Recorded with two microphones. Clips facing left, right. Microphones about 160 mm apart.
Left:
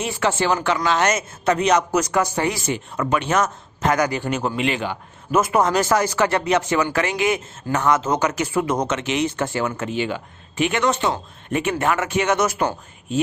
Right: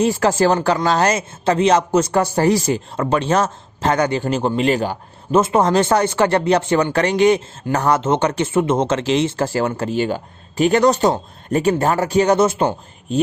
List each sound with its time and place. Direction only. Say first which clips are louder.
0.0 s a man's voice: right 6 dB; 35° right (ahead or behind)